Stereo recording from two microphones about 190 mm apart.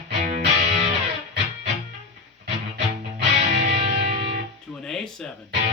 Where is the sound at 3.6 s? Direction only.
35° right (ahead or behind).